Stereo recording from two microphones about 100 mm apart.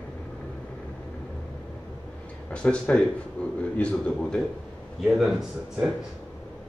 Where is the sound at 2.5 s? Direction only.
10° left (ahead or behind).